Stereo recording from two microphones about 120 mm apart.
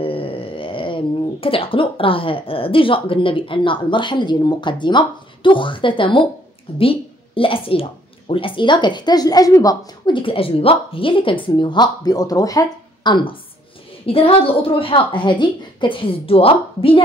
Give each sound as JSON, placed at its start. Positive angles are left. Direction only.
{"t": 0.0, "sound": "a woman's voice", "side_deg": 50}
{"t": 10.1, "sound": "a woman's voice", "side_deg": 50}